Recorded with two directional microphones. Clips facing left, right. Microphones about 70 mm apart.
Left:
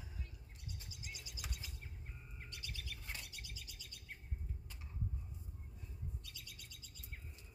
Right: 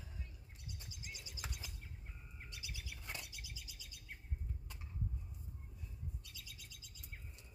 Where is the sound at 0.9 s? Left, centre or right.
Right.